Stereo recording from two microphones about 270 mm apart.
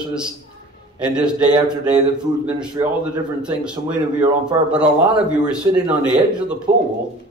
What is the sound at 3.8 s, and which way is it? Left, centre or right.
Speech, centre.